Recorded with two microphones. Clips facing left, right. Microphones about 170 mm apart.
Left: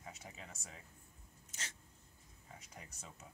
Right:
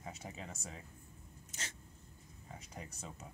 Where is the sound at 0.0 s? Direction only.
30° right (ahead or behind).